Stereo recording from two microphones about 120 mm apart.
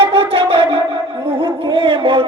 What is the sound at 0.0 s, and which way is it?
Music, 50° right (ahead or behind).